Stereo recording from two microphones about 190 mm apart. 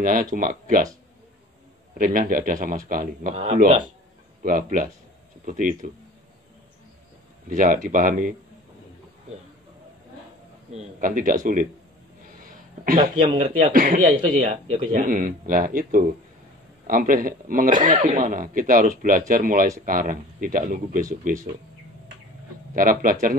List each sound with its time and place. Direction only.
0.0 s speech: 45° right (ahead or behind)
2.0 s speech: 45° right (ahead or behind)
7.4 s speech: 45° right (ahead or behind)
10.7 s speech: 40° right (ahead or behind)
12.4 s a sound: 45° right (ahead or behind)
13.4 s speech: 45° right (ahead or behind)
22.8 s speech: 45° right (ahead or behind)